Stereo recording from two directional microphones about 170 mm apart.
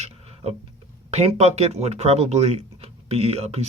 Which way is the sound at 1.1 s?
40° right (ahead or behind).